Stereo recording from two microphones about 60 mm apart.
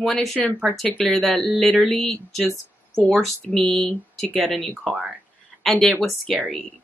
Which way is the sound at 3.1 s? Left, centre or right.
Centre.